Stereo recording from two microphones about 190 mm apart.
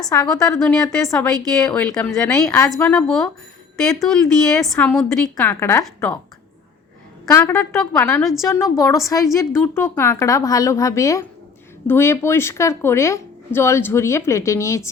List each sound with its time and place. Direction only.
0.1 s a woman's voice: 15° left (ahead or behind)
7.3 s speech: 10° left (ahead or behind)